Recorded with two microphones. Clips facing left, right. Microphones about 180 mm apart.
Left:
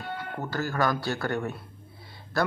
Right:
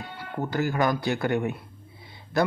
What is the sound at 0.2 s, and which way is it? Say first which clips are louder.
Speech: right 6 dB; 15° right (ahead or behind).